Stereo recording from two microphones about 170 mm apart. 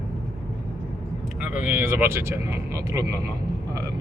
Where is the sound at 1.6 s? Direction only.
10° right (ahead or behind).